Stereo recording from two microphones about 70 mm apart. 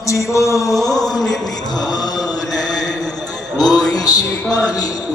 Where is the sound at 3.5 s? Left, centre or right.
Left.